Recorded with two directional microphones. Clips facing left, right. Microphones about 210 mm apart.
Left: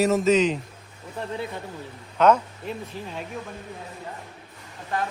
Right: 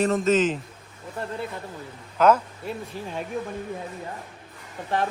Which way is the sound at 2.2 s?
5° right (ahead or behind).